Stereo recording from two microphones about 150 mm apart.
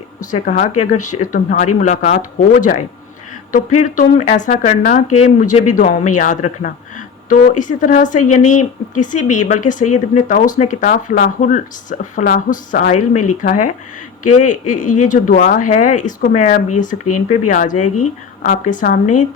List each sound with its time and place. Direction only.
0.3 s speech: 60° left (ahead or behind)
2.5 s speech: 65° left (ahead or behind)
3.5 s speech: 55° left (ahead or behind); by 12.9 s 80° left
12.9 s speech: 60° left (ahead or behind)